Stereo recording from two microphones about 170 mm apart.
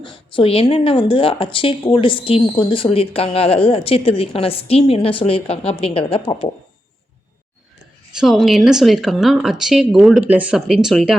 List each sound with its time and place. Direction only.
0.0 s speech: 30° left (ahead or behind)
8.1 s speech: centre (ahead or behind)